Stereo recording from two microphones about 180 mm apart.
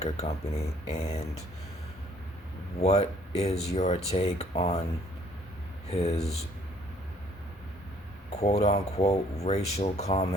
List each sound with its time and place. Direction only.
0.0 s speech: 35° left (ahead or behind)
2.8 s speech: 35° left (ahead or behind)
5.9 s speech: 35° left (ahead or behind)
8.3 s speech: 35° left (ahead or behind)